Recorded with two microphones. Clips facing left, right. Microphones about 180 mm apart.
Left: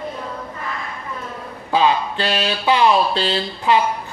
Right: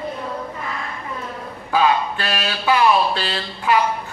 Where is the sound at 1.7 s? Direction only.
25° left (ahead or behind).